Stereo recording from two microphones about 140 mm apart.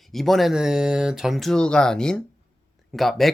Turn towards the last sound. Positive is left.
turn(degrees=0)  # may be behind; listen again after turning